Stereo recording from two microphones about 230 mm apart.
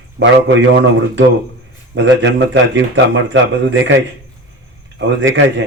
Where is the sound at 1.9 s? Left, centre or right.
Right.